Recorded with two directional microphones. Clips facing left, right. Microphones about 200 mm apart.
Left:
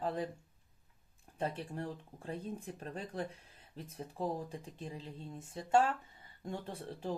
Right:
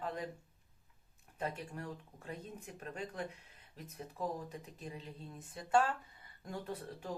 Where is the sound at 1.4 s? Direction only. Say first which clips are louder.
Left 3 dB; 30° left (ahead or behind).